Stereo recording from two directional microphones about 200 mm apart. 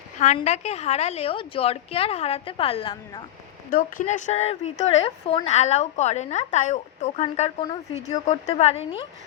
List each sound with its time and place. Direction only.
0.3 s a woman's voice: 35° left (ahead or behind)
3.7 s speech: 45° left (ahead or behind)